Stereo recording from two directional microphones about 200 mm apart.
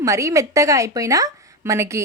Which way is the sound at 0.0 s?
15° right (ahead or behind).